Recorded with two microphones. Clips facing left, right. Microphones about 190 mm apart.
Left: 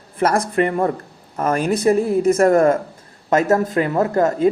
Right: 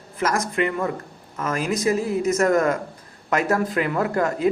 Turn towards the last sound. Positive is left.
turn(degrees=35)  # may be behind; listen again after turning